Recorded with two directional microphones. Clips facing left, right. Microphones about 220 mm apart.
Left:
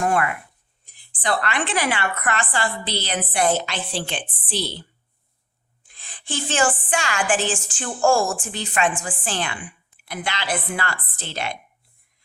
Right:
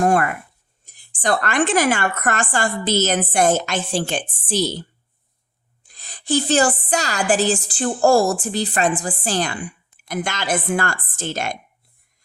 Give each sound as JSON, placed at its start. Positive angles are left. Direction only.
{"t": 0.0, "sound": "a woman's voice", "side_deg": -40}
{"t": 5.9, "sound": "a woman's voice", "side_deg": -40}